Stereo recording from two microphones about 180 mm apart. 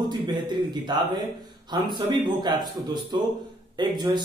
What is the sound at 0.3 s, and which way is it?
Speech, 25° right (ahead or behind).